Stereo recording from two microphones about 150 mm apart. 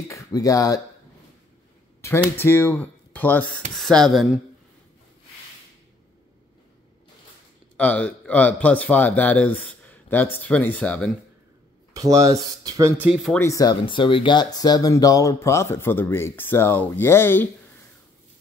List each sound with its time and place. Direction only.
0.1 s speech: 20° left (ahead or behind)
2.0 s speech: 15° left (ahead or behind)
3.5 s speech: centre (ahead or behind)
7.7 s speech: 10° left (ahead or behind)
11.9 s speech: 25° right (ahead or behind)
13.0 s speech: 5° right (ahead or behind)
13.4 s speech: 20° left (ahead or behind)